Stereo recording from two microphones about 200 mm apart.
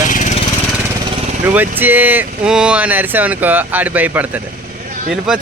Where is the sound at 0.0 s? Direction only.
40° left (ahead or behind).